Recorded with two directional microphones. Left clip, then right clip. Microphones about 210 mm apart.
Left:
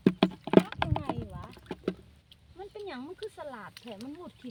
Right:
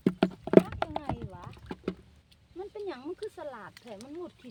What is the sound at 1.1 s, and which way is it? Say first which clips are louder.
Clip-clop: left 1 dB; 20° left (ahead or behind).